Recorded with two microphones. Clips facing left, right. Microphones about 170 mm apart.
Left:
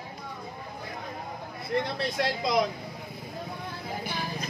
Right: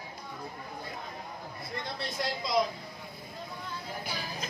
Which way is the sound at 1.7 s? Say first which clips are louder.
Left 9 dB; 65° left (ahead or behind).